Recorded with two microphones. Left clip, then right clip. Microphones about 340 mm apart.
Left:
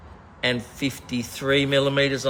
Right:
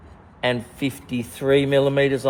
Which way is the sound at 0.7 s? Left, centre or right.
Centre.